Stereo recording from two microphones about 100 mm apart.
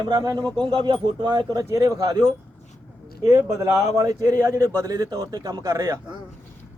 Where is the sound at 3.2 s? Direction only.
30° right (ahead or behind).